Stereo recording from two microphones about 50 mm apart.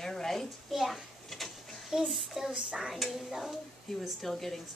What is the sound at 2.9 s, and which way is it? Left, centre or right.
A woman's voice, centre.